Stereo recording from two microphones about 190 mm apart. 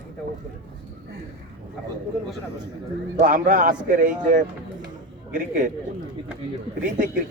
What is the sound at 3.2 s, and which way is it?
Speech, 45° right (ahead or behind).